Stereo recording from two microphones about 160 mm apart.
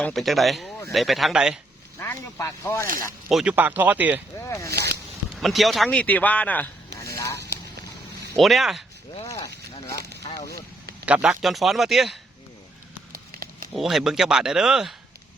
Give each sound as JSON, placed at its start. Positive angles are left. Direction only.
{"t": 0.0, "sound": "speech", "side_deg": 0}
{"t": 2.0, "sound": "speech", "side_deg": 10}
{"t": 3.2, "sound": "speech", "side_deg": -5}
{"t": 4.4, "sound": "speech", "side_deg": 20}
{"t": 4.7, "sound": "speech", "side_deg": -80}
{"t": 5.3, "sound": "speech", "side_deg": 0}
{"t": 8.4, "sound": "speech", "side_deg": 0}
{"t": 9.9, "sound": "speech", "side_deg": -90}
{"t": 10.3, "sound": "speech", "side_deg": 20}
{"t": 11.0, "sound": "speech", "side_deg": -5}
{"t": 13.1, "sound": "a sound", "side_deg": -65}
{"t": 13.7, "sound": "speech", "side_deg": 0}